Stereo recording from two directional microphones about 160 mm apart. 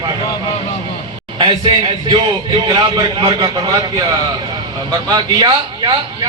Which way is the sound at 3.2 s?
25° right (ahead or behind).